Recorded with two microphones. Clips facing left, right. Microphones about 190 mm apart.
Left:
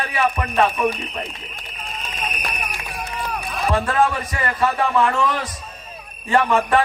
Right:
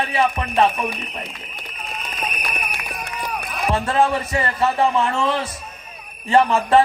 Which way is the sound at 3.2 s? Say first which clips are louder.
Even; centre (ahead or behind).